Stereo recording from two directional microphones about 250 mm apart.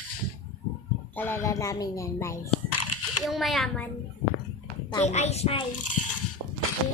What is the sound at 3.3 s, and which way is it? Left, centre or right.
Speech, centre.